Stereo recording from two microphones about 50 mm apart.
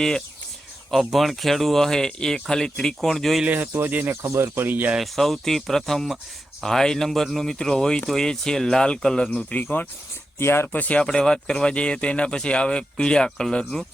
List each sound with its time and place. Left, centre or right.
0.9 s speech: centre
3.8 s speech: right
4.3 s speech: right
4.5 s speech: right
5.1 s speech: centre
9.4 s speech: left
10.3 s speech: left
10.7 s speech: left
11.0 s speech: centre